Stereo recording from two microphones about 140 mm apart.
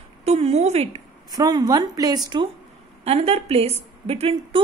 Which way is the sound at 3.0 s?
45° right (ahead or behind).